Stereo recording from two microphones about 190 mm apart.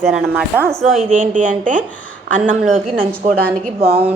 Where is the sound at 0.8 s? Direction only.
35° right (ahead or behind).